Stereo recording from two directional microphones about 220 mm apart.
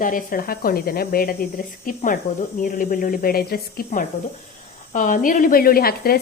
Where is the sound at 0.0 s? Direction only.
40° left (ahead or behind).